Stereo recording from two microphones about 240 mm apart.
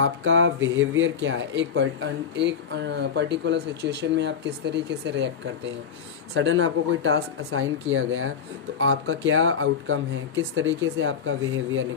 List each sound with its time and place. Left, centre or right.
0.0 s speech: right